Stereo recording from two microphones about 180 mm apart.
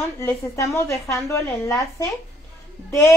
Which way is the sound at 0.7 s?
15° left (ahead or behind).